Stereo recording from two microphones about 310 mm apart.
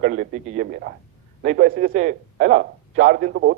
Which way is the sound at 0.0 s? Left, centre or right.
Right.